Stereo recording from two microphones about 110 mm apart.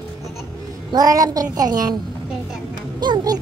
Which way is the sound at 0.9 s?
35° right (ahead or behind).